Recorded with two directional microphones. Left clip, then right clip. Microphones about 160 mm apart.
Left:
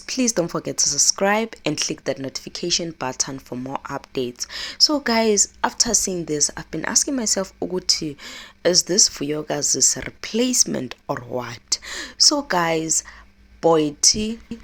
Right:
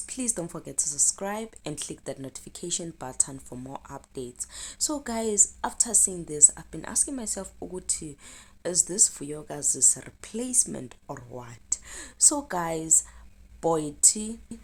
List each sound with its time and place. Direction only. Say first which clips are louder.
0.1 s speech: left 13 dB; 25° left (ahead or behind)
11.0 s speech: left 13 dB; 55° left (ahead or behind)
11.3 s speech: left 11 dB; 30° left (ahead or behind)
12.5 s a woman's voice: left 10 dB; 15° left (ahead or behind)
14.0 s a woman's voice: left 8 dB; 15° left (ahead or behind)